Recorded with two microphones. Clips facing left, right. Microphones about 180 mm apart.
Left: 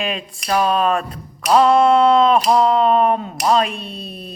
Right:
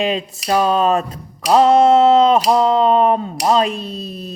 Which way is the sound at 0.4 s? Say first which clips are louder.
Right 2 dB; 25° right (ahead or behind).